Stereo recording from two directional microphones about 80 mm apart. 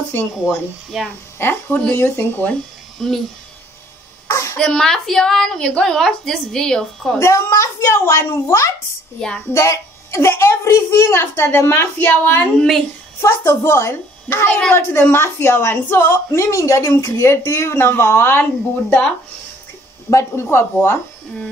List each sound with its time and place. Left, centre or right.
0.1 s speech: left
3.0 s speech: centre
4.3 s a sound: left
4.6 s a woman's voice: centre
7.2 s a woman's voice: left
12.5 s speech: centre
13.2 s a woman's voice: left
20.1 s a woman's voice: left